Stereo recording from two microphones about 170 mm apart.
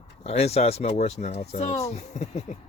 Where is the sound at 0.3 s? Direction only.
35° left (ahead or behind).